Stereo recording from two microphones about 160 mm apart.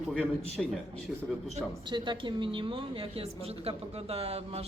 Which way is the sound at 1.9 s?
30° right (ahead or behind).